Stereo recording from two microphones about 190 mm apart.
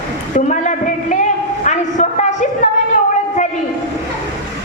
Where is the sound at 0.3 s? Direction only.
40° left (ahead or behind).